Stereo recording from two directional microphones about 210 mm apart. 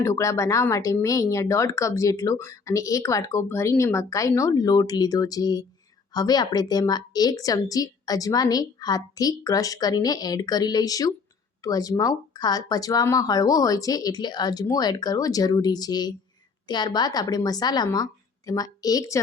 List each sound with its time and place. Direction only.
0.0 s speech: 15° left (ahead or behind)